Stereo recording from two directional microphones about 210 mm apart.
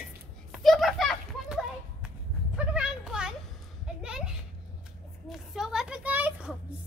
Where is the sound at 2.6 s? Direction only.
5° right (ahead or behind).